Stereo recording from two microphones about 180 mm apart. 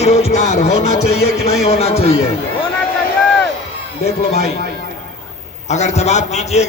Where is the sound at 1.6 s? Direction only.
35° left (ahead or behind).